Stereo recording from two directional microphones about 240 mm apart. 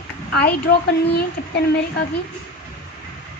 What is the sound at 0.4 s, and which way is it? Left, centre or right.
Speech, left.